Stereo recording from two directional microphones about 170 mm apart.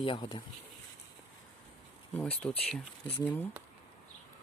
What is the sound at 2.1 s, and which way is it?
Speech, 10° left (ahead or behind).